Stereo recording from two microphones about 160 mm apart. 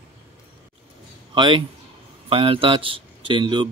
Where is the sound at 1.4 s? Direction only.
30° right (ahead or behind).